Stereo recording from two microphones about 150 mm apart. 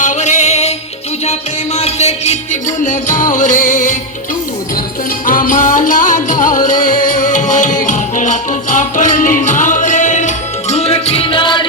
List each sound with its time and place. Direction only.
0.0 s music: 55° left (ahead or behind)
5.2 s music: 65° left (ahead or behind); by 11.6 s 35° left (ahead or behind)